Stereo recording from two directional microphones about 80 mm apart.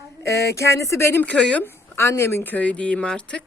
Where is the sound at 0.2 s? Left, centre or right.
Left.